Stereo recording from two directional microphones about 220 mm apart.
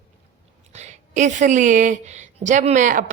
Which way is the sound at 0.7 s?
30° right (ahead or behind).